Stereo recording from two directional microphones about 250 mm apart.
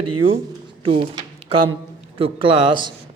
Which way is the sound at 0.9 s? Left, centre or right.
Right.